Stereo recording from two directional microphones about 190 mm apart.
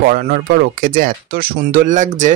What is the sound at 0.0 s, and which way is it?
Speech, 50° right (ahead or behind).